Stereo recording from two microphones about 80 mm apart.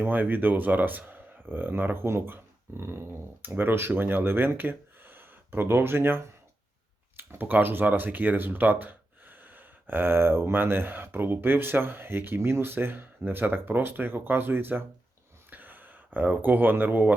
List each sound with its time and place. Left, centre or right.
0.0 s speech: right
15.4 s a sound: right
16.1 s speech: right